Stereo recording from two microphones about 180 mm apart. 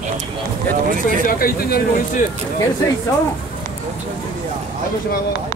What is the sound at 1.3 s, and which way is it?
Speech, 55° left (ahead or behind).